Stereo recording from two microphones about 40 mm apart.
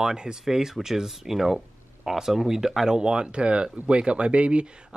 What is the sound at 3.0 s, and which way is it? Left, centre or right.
Speech, right.